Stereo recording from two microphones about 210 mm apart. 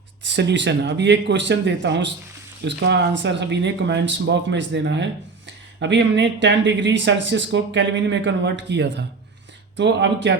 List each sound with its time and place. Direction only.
0.3 s speech: 55° right (ahead or behind)